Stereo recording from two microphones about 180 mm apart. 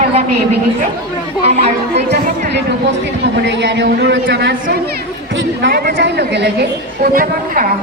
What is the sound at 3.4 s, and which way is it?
A woman's voice, 75° right (ahead or behind).